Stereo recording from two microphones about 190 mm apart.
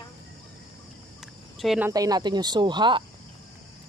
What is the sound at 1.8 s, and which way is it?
Speech, 20° right (ahead or behind).